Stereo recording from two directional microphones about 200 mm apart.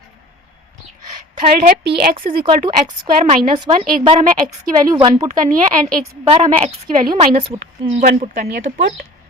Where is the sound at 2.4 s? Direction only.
25° right (ahead or behind).